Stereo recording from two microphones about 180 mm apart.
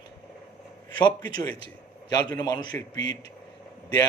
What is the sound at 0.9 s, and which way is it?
A man's voice, 25° left (ahead or behind).